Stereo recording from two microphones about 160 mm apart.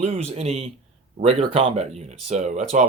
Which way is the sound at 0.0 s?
40° right (ahead or behind).